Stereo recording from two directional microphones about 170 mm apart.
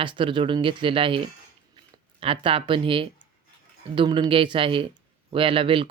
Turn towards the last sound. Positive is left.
turn(degrees=-30)  # may be behind; listen again after turning